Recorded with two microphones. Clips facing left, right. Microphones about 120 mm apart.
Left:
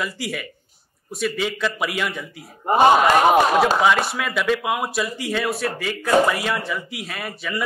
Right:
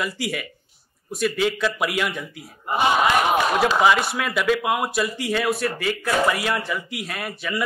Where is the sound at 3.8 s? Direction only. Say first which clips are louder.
Even; centre (ahead or behind).